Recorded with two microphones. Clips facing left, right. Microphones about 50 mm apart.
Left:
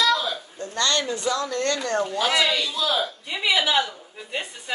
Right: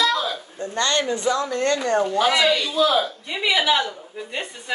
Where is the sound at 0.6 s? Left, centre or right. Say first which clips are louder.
Right 2 dB; right.